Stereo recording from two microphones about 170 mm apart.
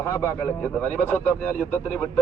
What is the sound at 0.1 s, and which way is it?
Speech, 15° left (ahead or behind).